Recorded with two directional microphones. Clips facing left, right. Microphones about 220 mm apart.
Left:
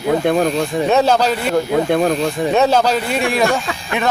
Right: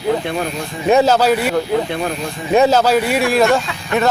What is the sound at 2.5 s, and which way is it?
A man's voice, 10° right (ahead or behind).